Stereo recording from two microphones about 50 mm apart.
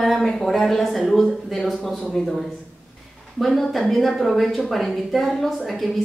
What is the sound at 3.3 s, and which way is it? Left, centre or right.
A woman's voice, centre.